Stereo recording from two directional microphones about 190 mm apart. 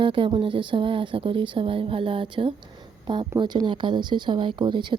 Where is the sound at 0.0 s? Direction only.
25° right (ahead or behind).